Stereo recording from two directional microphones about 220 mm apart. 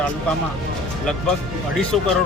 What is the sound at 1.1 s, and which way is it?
Speech, 5° left (ahead or behind).